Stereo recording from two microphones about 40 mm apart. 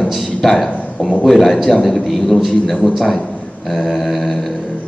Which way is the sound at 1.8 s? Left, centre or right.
Centre.